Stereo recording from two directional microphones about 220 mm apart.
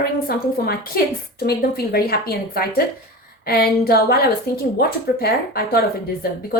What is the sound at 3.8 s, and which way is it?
A woman's voice, 45° left (ahead or behind).